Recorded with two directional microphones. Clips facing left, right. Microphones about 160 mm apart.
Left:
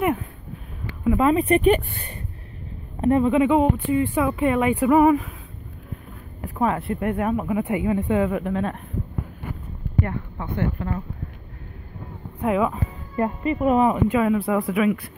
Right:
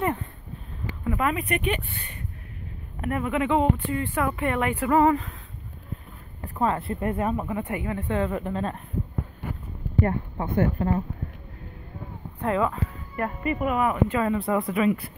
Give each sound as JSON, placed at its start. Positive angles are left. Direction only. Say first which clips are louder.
{"t": 1.0, "sound": "speech", "louder": "left 8 dB", "side_deg": 25}
{"t": 3.0, "sound": "speech", "louder": "left 8 dB", "side_deg": 25}
{"t": 6.4, "sound": "speech", "louder": "left 2 dB", "side_deg": 10}
{"t": 10.5, "sound": "speech", "louder": "right 3 dB", "side_deg": -40}
{"t": 12.4, "sound": "speech", "louder": "left 3 dB", "side_deg": 10}
{"t": 13.1, "sound": "speech", "louder": "left 5 dB", "side_deg": 25}
{"t": 14.0, "sound": "speech", "louder": "left 5 dB", "side_deg": 10}